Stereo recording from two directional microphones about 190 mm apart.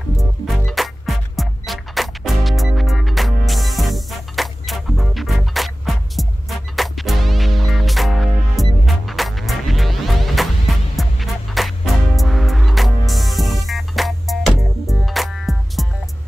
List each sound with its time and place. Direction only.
0.2 s music: centre (ahead or behind)